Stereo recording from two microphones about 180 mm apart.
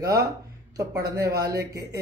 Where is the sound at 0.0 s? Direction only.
20° right (ahead or behind).